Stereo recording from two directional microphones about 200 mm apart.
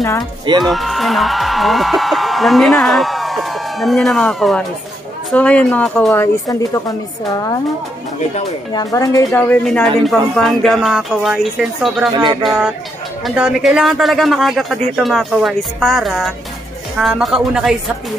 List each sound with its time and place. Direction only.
0.7 s speech: centre (ahead or behind)
8.7 s speech: 15° left (ahead or behind); by 12.1 s centre (ahead or behind)
12.1 s music: 20° right (ahead or behind)
12.4 s speech: 5° right (ahead or behind)